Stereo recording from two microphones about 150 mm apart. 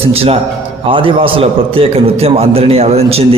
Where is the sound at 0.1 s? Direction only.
40° right (ahead or behind).